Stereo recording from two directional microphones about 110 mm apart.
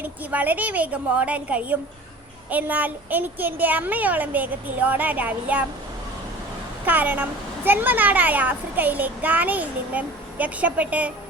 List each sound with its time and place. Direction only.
0.0 s a woman's voice: 15° right (ahead or behind)
6.8 s a woman's voice: 15° right (ahead or behind)